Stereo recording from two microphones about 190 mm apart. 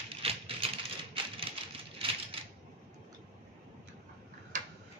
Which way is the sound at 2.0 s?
30° right (ahead or behind).